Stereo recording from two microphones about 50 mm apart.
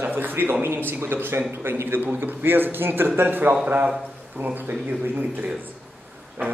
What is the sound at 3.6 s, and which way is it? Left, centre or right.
Speech, right.